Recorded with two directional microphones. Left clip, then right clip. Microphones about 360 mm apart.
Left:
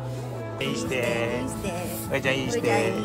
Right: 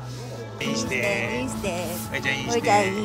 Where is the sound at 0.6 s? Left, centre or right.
Centre.